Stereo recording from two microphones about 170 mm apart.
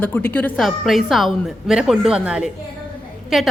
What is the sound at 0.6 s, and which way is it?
A woman's voice, centre (ahead or behind).